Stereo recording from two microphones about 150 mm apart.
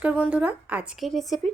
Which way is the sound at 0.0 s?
10° right (ahead or behind).